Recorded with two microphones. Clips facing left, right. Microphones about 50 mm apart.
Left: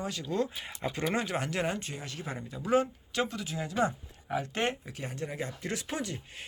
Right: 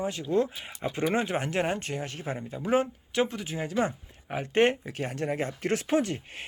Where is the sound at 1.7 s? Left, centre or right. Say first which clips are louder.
Right 5 dB; right.